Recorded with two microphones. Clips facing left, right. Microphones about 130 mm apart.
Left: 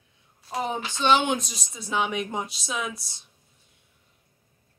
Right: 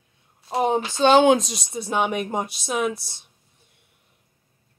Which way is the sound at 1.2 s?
90° right.